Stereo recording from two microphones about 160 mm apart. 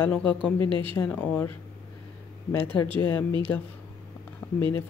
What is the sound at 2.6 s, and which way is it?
Speech, 35° right (ahead or behind).